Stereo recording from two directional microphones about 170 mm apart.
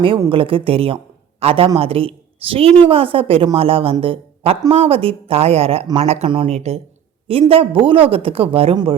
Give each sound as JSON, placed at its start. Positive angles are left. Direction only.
{"t": 0.3, "sound": "a man's voice", "side_deg": -30}